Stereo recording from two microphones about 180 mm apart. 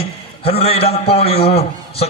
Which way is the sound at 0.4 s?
35° left (ahead or behind).